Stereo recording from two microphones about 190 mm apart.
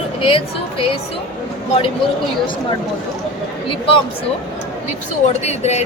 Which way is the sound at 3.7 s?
25° left (ahead or behind).